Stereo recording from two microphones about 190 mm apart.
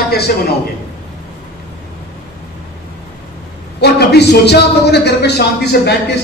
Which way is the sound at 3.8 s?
60° left (ahead or behind).